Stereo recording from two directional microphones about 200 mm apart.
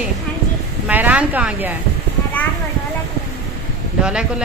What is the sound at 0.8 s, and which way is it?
Speech, 10° right (ahead or behind).